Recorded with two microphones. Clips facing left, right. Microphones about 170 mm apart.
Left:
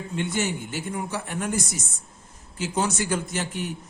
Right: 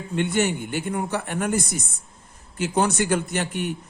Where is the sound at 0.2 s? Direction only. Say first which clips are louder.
Right 5 dB; 60° right (ahead or behind).